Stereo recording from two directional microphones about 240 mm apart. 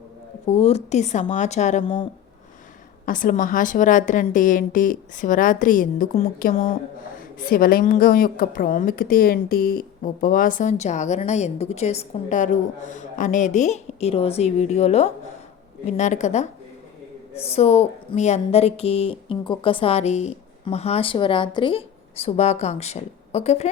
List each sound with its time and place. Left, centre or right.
0.4 s speech: left
3.1 s a woman's voice: left